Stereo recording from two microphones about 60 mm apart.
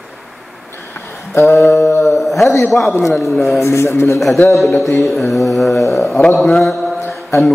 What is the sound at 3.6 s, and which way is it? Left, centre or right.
Speech, left.